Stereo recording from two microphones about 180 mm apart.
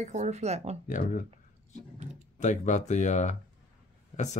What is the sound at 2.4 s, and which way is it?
Speech, 40° left (ahead or behind).